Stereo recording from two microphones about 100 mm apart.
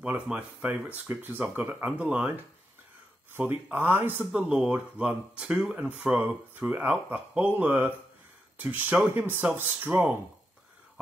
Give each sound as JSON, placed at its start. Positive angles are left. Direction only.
{"t": 0.0, "sound": "speech", "side_deg": -15}
{"t": 3.3, "sound": "speech", "side_deg": -20}